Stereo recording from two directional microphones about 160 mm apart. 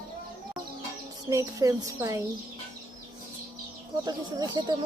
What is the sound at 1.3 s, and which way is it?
Speech, 20° right (ahead or behind).